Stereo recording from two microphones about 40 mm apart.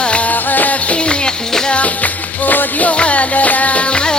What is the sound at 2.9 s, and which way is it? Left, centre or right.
Music, left.